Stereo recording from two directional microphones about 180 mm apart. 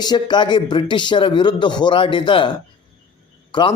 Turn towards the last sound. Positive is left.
turn(degrees=25)  # may be behind; listen again after turning